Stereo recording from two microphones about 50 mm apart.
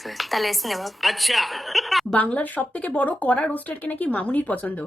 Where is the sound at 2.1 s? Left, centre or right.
Left.